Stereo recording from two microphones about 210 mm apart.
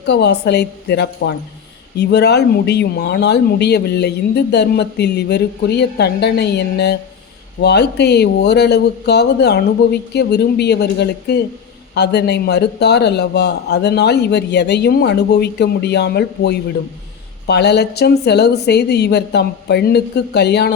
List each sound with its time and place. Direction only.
0.1 s speech: 50° left (ahead or behind)